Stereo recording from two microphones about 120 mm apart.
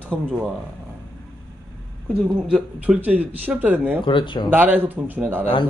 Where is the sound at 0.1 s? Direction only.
5° right (ahead or behind).